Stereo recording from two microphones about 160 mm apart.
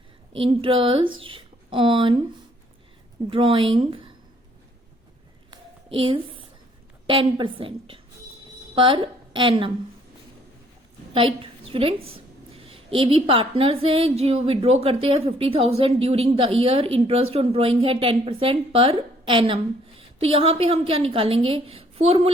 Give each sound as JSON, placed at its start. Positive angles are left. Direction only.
{"t": 0.3, "sound": "a woman's voice", "side_deg": -35}
{"t": 3.2, "sound": "a woman's voice", "side_deg": -35}
{"t": 5.5, "sound": "a sound", "side_deg": -35}
{"t": 7.1, "sound": "a woman's voice", "side_deg": -30}
{"t": 11.1, "sound": "a woman's voice", "side_deg": -35}